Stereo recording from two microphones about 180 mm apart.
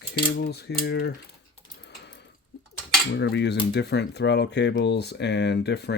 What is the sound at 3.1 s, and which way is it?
Speech, 75° left (ahead or behind).